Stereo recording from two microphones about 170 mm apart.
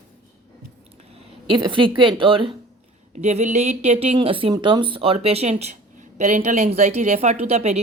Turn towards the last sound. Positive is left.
turn(degrees=-40)  # may be behind; listen again after turning